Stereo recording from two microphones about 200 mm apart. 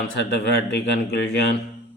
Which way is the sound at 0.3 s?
55° left (ahead or behind).